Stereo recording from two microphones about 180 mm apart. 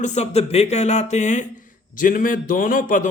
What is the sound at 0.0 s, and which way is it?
Speech, 40° left (ahead or behind).